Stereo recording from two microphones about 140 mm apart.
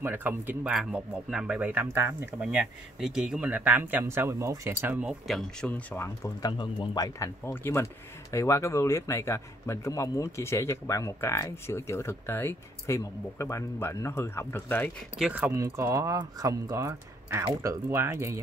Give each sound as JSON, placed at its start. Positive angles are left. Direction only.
{"t": 0.0, "sound": "a man's voice", "side_deg": -15}
{"t": 5.2, "sound": "speech", "side_deg": 0}
{"t": 5.7, "sound": "speech", "side_deg": 15}
{"t": 6.4, "sound": "speech", "side_deg": 30}
{"t": 15.1, "sound": "speech", "side_deg": -10}